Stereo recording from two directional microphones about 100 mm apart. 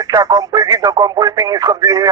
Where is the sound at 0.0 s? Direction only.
40° right (ahead or behind).